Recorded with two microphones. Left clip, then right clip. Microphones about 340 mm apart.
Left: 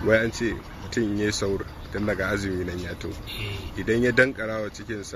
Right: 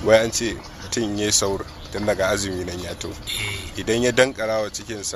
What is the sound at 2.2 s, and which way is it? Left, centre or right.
Speech, centre.